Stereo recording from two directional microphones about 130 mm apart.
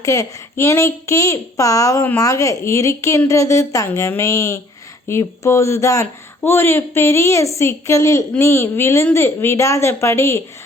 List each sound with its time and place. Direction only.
0.0 s speech: 25° left (ahead or behind)